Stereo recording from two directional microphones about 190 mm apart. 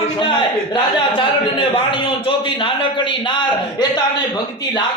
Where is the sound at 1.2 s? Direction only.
25° left (ahead or behind).